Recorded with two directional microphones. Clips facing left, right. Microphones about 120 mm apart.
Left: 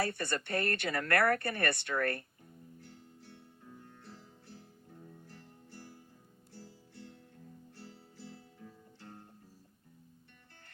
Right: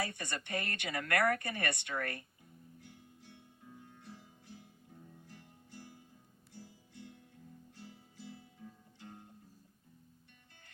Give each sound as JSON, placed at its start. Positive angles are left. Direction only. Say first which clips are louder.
{"t": 0.0, "sound": "speech", "louder": "left 5 dB", "side_deg": -15}
{"t": 2.8, "sound": "music", "louder": "left 3 dB", "side_deg": -15}
{"t": 6.5, "sound": "guitar", "louder": "left 1 dB", "side_deg": -15}